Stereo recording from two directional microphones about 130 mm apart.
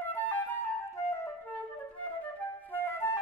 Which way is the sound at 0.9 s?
20° left (ahead or behind).